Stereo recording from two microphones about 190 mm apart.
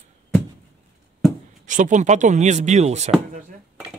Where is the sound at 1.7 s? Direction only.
40° right (ahead or behind).